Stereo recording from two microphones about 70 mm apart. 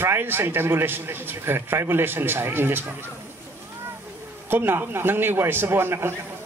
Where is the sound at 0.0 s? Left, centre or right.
Right.